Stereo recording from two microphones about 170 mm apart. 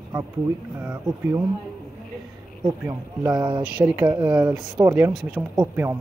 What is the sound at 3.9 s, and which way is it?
Speech, 25° right (ahead or behind).